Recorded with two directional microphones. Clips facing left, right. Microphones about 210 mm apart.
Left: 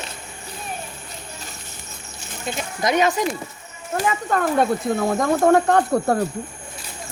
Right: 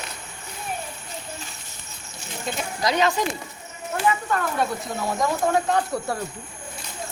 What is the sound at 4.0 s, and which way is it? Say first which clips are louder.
Speech: left 2 dB; 45° left (ahead or behind).